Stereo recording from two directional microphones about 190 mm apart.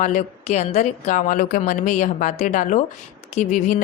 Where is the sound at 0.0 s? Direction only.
40° left (ahead or behind).